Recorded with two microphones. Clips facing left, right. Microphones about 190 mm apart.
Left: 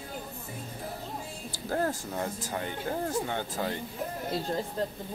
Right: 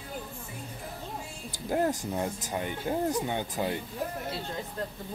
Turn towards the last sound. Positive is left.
turn(degrees=35)  # may be behind; listen again after turning